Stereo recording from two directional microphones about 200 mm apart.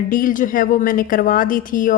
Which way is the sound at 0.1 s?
45° left (ahead or behind).